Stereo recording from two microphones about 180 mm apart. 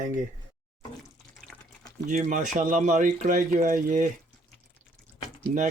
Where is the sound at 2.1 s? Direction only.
45° right (ahead or behind).